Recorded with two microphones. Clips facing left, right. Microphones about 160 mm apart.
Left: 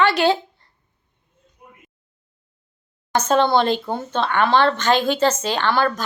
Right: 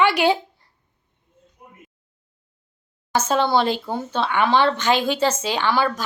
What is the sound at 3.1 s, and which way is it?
A woman's voice, 10° right (ahead or behind).